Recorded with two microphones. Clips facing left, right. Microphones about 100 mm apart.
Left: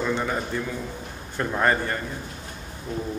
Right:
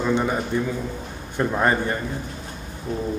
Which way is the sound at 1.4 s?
15° right (ahead or behind).